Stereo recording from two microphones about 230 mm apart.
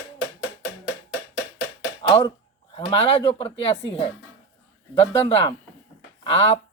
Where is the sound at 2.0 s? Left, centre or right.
Left.